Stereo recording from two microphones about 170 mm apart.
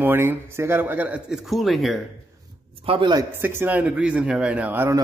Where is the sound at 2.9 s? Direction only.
25° right (ahead or behind).